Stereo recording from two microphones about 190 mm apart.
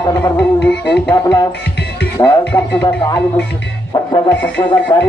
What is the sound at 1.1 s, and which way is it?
Speech, 20° left (ahead or behind).